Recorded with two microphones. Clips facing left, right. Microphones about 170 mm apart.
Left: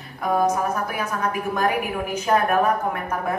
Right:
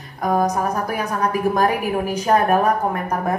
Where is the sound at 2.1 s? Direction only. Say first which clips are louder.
Right 2 dB; 35° right (ahead or behind).